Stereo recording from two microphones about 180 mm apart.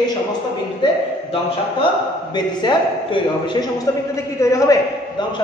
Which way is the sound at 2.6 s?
25° left (ahead or behind).